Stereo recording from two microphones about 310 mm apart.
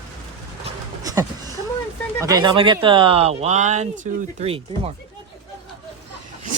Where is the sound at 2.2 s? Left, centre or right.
Centre.